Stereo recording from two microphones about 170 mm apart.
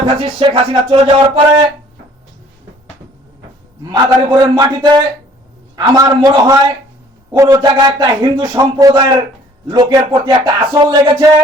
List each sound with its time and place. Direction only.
0.0 s music: 30° right (ahead or behind)
3.8 s a man's voice: 25° right (ahead or behind)